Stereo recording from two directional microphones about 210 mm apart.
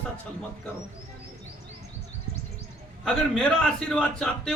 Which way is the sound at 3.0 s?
Centre (ahead or behind).